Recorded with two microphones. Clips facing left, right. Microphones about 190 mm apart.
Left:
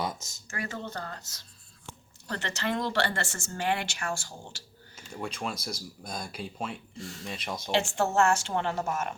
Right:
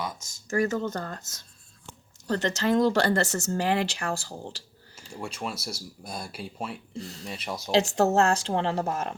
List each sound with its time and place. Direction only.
0.4 s speech: 40° right (ahead or behind)
5.1 s speech: 5° right (ahead or behind)
7.7 s speech: 40° right (ahead or behind)